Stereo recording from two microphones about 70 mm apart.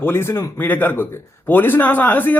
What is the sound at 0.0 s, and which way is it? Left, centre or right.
A man's voice, left.